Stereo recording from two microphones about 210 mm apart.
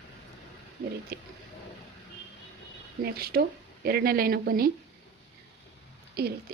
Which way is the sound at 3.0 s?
45° right (ahead or behind).